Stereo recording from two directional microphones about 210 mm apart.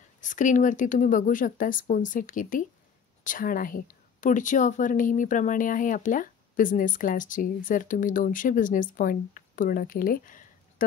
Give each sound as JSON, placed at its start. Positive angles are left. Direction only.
{"t": 0.2, "sound": "a woman's voice", "side_deg": 35}